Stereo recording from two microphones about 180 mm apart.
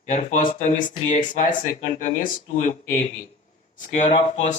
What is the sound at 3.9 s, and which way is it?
Speech, 40° left (ahead or behind).